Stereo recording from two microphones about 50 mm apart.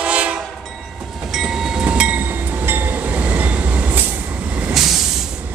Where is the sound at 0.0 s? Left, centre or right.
Right.